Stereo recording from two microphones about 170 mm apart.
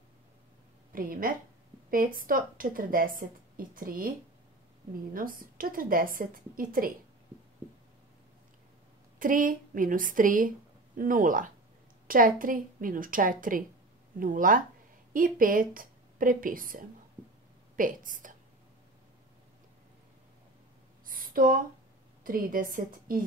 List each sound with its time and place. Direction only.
0.9 s a woman's voice: 55° right (ahead or behind)
5.1 s a woman's voice: 55° right (ahead or behind)
9.2 s a woman's voice: 55° right (ahead or behind)
21.0 s a sound: 55° right (ahead or behind)
22.2 s a woman's voice: 55° right (ahead or behind)